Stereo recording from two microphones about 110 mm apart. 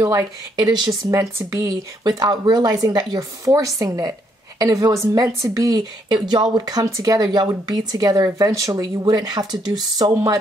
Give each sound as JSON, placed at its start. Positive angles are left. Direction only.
{"t": 0.0, "sound": "speech", "side_deg": -35}
{"t": 6.0, "sound": "speech", "side_deg": -40}